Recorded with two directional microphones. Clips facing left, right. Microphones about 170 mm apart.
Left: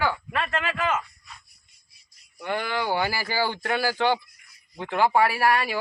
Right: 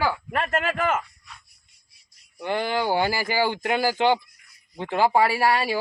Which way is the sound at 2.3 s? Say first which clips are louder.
Right 3 dB; 30° right (ahead or behind).